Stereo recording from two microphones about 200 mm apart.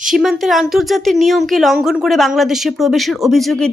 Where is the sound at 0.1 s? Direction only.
Centre (ahead or behind).